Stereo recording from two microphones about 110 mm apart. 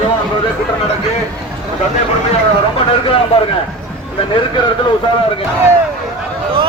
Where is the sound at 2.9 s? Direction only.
55° left (ahead or behind).